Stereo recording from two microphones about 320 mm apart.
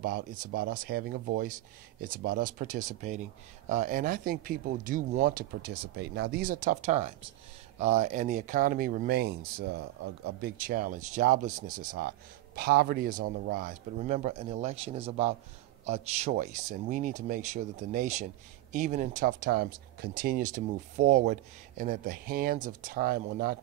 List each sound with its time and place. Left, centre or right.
0.0 s speech: right